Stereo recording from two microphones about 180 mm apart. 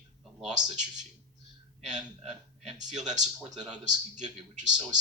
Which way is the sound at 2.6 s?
40° right (ahead or behind).